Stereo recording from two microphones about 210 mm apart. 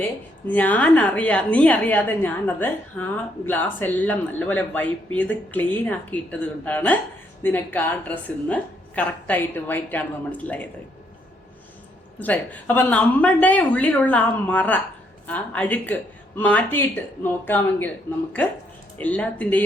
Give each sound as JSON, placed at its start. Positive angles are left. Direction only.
{"t": 0.0, "sound": "a woman's voice", "side_deg": 10}
{"t": 12.2, "sound": "a woman's voice", "side_deg": 5}